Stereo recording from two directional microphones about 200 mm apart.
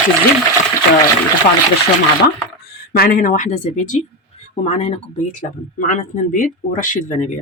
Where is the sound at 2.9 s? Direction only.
50° left (ahead or behind).